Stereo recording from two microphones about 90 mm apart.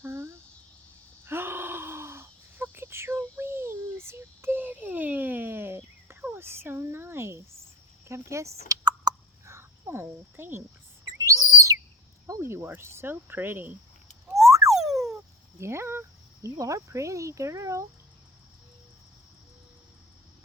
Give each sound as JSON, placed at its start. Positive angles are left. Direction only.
{"t": 0.0, "sound": "cricket", "side_deg": -30}
{"t": 1.2, "sound": "gasp", "side_deg": -25}
{"t": 8.0, "sound": "a sound", "side_deg": -35}
{"t": 8.8, "sound": "a sound", "side_deg": -50}
{"t": 9.5, "sound": "cricket", "side_deg": -30}
{"t": 11.2, "sound": "whistle", "side_deg": -35}
{"t": 12.3, "sound": "speech", "side_deg": -30}
{"t": 14.3, "sound": "frog", "side_deg": -35}
{"t": 14.7, "sound": "frog", "side_deg": -5}
{"t": 15.5, "sound": "speech", "side_deg": -30}